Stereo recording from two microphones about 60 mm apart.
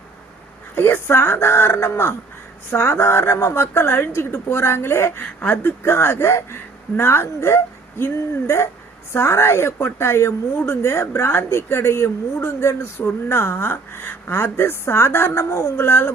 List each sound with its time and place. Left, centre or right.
0.8 s speech: left